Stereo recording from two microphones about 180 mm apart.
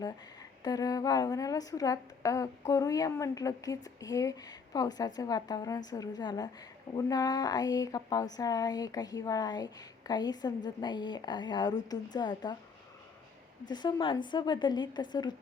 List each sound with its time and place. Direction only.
0.6 s a woman's voice: 20° left (ahead or behind)
13.7 s a woman's voice: 25° left (ahead or behind)